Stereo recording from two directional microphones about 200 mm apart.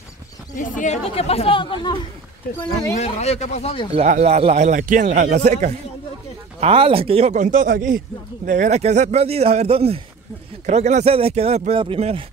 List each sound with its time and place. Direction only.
0.6 s speech: 40° left (ahead or behind); by 2.0 s 25° left (ahead or behind)
3.0 s speech: 35° left (ahead or behind)
4.0 s a man's voice: 35° right (ahead or behind)